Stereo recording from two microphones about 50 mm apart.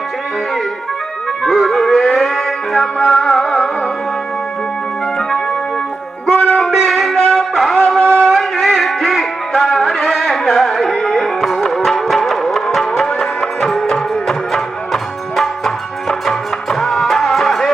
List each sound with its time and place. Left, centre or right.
1.5 s music: centre
6.2 s music: centre